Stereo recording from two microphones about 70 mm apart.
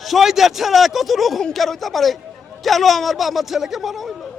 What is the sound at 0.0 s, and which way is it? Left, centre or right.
Speech, centre.